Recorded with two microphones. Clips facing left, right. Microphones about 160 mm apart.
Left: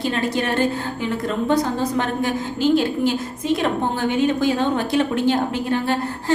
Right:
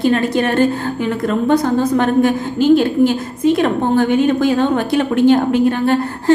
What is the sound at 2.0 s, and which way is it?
A woman's voice, 55° right (ahead or behind).